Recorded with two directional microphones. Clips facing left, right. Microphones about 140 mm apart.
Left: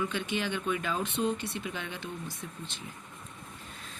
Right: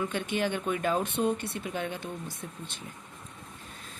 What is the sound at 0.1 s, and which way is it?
Speech, 50° right (ahead or behind).